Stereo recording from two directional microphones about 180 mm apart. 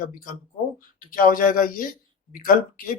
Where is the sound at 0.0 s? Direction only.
50° left (ahead or behind).